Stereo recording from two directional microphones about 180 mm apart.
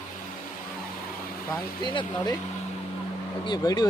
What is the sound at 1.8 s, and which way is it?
Speech, 25° left (ahead or behind).